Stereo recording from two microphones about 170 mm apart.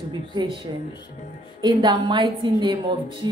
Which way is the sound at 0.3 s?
25° right (ahead or behind).